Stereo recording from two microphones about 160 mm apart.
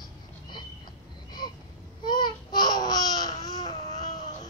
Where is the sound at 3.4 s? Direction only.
25° left (ahead or behind).